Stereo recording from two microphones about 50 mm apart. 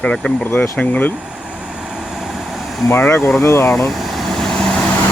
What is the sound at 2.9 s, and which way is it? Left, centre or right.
Speech, left.